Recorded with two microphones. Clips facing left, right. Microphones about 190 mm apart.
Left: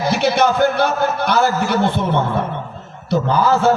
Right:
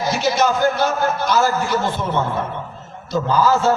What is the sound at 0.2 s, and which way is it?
A man's voice, 60° left (ahead or behind).